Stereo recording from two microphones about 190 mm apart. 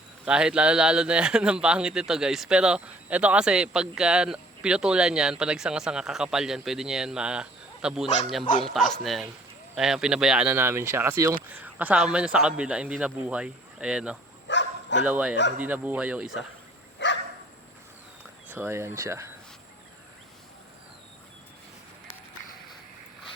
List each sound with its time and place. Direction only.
0.3 s speech: 5° right (ahead or behind)
14.4 s dog: 70° left (ahead or behind)
15.0 s speech: 10° right (ahead or behind)
17.0 s dog: 70° left (ahead or behind)
18.5 s speech: 10° right (ahead or behind)